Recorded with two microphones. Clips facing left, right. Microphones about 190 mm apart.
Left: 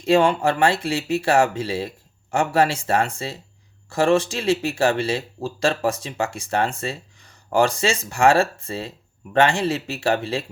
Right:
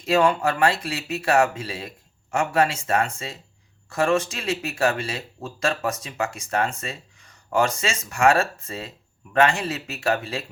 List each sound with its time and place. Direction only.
0.0 s speech: 30° left (ahead or behind)